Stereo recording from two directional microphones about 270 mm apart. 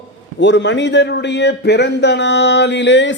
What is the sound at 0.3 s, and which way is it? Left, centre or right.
A man's voice, left.